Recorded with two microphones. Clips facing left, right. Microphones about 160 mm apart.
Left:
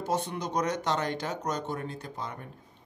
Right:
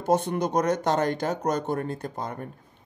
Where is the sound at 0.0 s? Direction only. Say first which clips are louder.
Right 7 dB; 50° right (ahead or behind).